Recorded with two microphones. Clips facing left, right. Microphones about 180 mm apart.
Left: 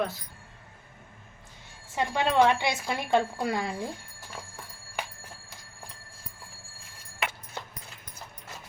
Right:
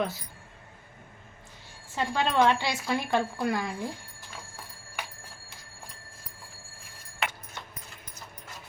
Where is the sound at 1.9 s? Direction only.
15° left (ahead or behind).